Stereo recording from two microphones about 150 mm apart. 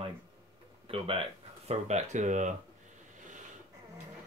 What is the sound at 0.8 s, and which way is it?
Speech, 40° right (ahead or behind).